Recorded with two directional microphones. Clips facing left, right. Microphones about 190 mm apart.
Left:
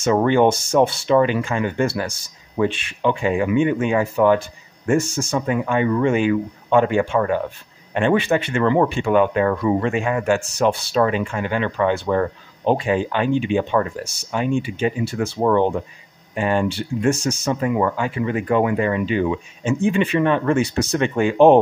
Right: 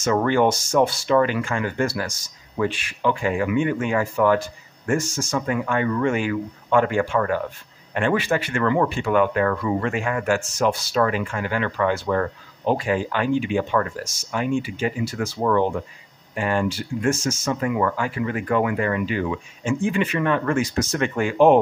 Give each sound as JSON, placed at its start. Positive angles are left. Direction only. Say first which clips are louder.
{"t": 0.0, "sound": "speech", "louder": "left 3 dB", "side_deg": 20}